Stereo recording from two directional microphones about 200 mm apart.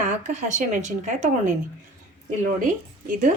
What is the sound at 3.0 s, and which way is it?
Speech, 40° right (ahead or behind).